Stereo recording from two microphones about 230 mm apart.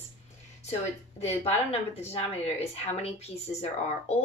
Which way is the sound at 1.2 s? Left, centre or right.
Left.